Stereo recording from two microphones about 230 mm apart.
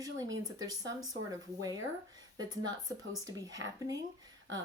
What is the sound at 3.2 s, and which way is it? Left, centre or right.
Speech, centre.